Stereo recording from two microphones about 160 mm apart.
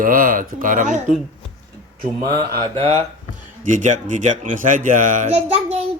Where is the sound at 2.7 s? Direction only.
35° right (ahead or behind).